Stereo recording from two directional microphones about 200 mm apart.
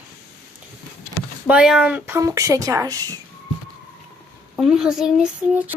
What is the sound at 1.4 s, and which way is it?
Speech, 5° right (ahead or behind).